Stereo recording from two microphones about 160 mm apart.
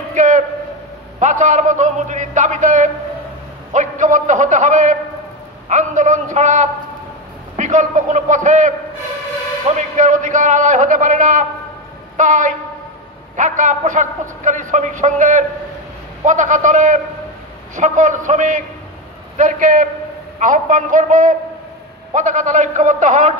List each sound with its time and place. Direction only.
0.1 s a man's voice: 50° right (ahead or behind)